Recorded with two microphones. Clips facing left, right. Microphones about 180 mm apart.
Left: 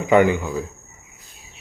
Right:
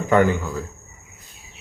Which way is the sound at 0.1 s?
15° left (ahead or behind).